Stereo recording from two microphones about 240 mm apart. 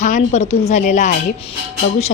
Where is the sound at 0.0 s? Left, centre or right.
Left.